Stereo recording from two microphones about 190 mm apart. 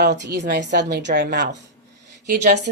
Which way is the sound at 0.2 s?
65° right (ahead or behind).